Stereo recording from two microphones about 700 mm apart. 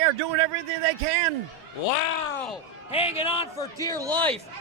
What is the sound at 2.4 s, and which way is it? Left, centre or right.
A man's voice, centre.